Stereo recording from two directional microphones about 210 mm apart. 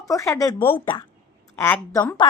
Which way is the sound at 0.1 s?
15° left (ahead or behind).